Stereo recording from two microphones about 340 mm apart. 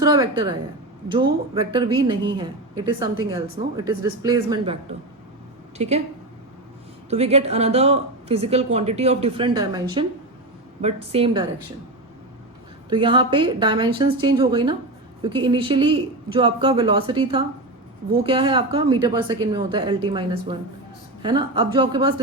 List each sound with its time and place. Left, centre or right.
0.0 s speech: centre
1.7 s a woman's voice: centre
7.1 s speech: centre
12.9 s speech: centre